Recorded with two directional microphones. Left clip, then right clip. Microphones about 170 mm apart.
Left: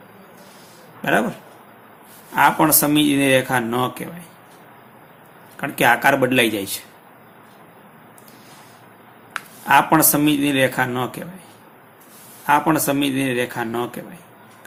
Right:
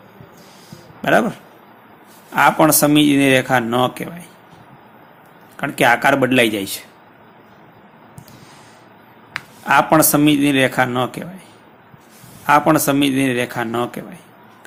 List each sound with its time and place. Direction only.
1.0 s speech: 30° right (ahead or behind)
5.5 s a man's voice: 30° right (ahead or behind)
9.6 s speech: 30° right (ahead or behind)
12.5 s speech: 35° right (ahead or behind)